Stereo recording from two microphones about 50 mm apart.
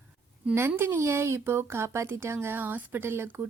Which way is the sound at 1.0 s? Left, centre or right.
Right.